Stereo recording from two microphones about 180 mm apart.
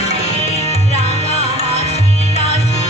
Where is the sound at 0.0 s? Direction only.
35° left (ahead or behind).